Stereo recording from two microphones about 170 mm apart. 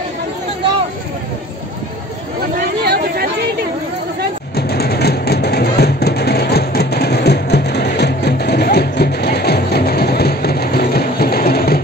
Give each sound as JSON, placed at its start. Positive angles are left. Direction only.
{"t": 2.8, "sound": "chatter", "side_deg": -70}
{"t": 4.6, "sound": "music", "side_deg": 70}